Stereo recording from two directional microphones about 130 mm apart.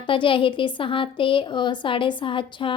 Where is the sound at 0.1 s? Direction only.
40° left (ahead or behind).